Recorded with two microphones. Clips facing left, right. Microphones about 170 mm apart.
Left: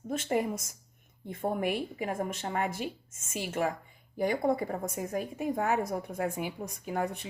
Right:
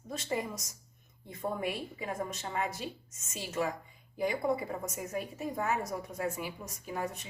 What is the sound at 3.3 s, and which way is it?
A woman's voice, 55° left (ahead or behind).